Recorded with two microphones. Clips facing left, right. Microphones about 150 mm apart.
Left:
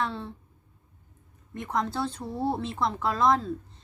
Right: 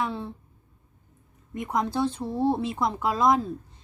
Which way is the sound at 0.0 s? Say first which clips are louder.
Right 2 dB; 10° right (ahead or behind).